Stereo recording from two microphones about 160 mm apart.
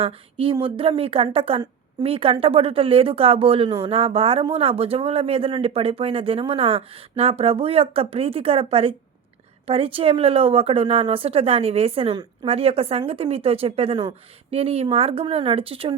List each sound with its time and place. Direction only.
0.0 s a woman's voice: 35° right (ahead or behind)